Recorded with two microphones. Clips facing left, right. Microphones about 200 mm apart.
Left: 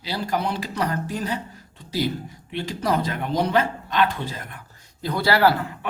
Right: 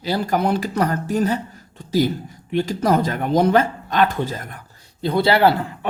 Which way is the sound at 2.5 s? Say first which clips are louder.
Right 6 dB; 45° right (ahead or behind).